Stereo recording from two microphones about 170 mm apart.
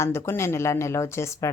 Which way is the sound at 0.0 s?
15° left (ahead or behind).